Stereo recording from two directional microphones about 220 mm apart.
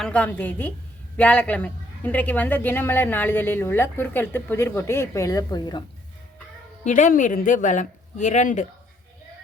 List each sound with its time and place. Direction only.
0.0 s a woman's voice: 5° left (ahead or behind)
6.8 s speech: 35° left (ahead or behind)